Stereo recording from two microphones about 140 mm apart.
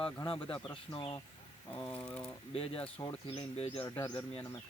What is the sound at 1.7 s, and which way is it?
Speech, 10° left (ahead or behind).